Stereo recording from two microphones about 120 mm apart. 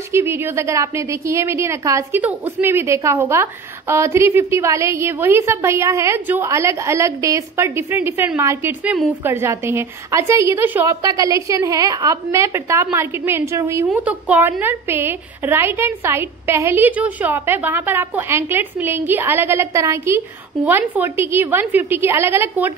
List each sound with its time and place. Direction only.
0.1 s a woman's voice: 20° right (ahead or behind)
10.9 s a woman's voice: 30° right (ahead or behind)
14.0 s a woman's voice: 10° right (ahead or behind)